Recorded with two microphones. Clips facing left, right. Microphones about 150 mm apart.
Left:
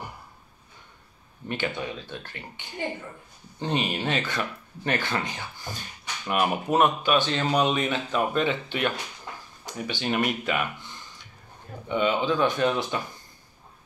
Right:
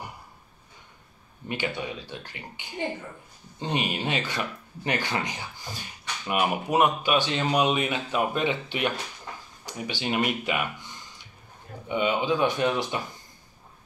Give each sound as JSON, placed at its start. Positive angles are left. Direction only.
{"t": 1.5, "sound": "speech", "side_deg": -10}
{"t": 9.7, "sound": "speech", "side_deg": -10}
{"t": 11.9, "sound": "speech", "side_deg": -15}